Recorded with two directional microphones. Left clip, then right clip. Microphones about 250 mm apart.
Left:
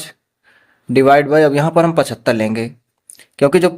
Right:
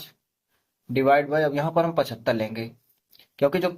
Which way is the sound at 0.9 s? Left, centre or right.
Left.